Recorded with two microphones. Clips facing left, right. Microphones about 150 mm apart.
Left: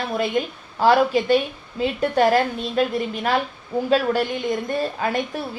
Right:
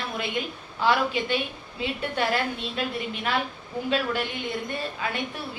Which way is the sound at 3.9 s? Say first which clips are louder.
Left 7 dB; 40° left (ahead or behind).